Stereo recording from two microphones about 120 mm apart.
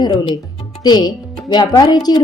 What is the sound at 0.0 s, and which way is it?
A woman's voice, 40° left (ahead or behind).